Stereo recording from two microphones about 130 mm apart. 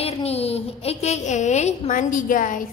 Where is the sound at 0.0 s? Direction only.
50° left (ahead or behind); by 2.5 s 90° left.